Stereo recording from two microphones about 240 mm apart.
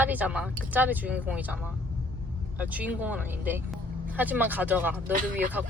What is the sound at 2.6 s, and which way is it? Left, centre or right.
A woman's voice, centre.